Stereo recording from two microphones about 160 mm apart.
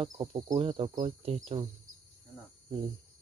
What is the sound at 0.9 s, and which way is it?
Speech, 45° right (ahead or behind).